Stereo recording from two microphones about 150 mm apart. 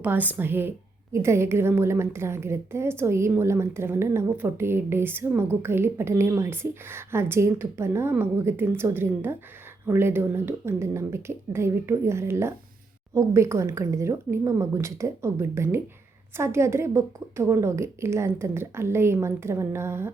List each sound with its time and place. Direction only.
0.0 s a woman's voice: 10° right (ahead or behind)